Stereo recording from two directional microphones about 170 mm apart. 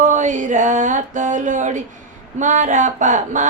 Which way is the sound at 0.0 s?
45° right (ahead or behind).